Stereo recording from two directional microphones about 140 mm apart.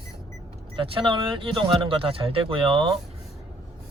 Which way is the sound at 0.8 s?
40° right (ahead or behind).